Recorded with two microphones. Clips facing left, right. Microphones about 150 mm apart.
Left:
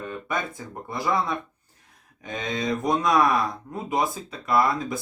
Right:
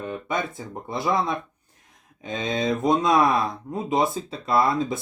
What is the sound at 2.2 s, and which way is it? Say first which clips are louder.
Speech: right 3 dB; 25° right (ahead or behind).